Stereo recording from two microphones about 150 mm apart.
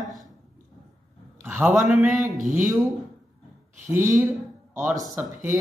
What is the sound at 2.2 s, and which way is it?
Speech, 60° right (ahead or behind).